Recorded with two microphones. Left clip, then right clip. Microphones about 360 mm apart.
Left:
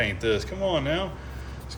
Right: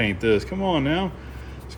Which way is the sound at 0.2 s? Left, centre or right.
Centre.